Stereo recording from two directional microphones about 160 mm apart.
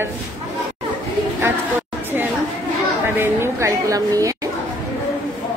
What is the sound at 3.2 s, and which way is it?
A woman's voice, 15° right (ahead or behind).